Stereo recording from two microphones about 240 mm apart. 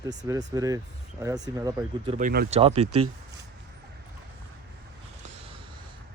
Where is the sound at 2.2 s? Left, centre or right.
Right.